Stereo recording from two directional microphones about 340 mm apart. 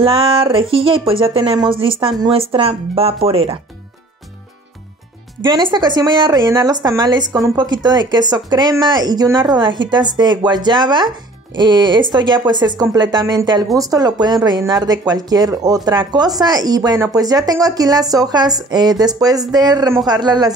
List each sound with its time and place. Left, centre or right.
0.0 s speech: centre
5.4 s speech: centre